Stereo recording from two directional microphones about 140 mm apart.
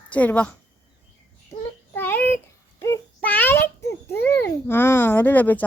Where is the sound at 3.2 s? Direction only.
10° left (ahead or behind).